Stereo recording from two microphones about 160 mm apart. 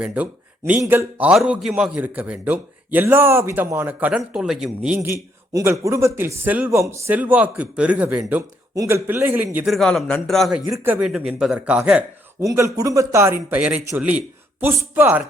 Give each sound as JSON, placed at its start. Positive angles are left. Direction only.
{"t": 0.0, "sound": "a man's voice", "side_deg": -10}
{"t": 1.3, "sound": "a man's voice", "side_deg": 0}
{"t": 5.0, "sound": "a man's voice", "side_deg": -15}
{"t": 9.6, "sound": "a man's voice", "side_deg": 0}
{"t": 10.7, "sound": "a man's voice", "side_deg": -15}
{"t": 11.1, "sound": "a man's voice", "side_deg": 0}
{"t": 12.5, "sound": "a man's voice", "side_deg": -20}